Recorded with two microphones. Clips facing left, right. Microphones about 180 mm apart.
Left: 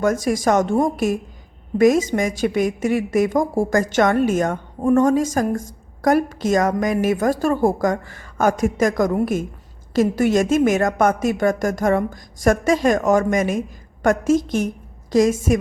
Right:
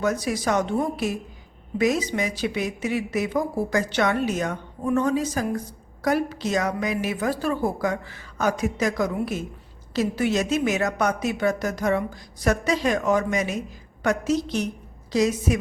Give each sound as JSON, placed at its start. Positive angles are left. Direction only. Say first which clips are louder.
{"t": 0.0, "sound": "a woman's voice", "louder": "left 6 dB", "side_deg": 50}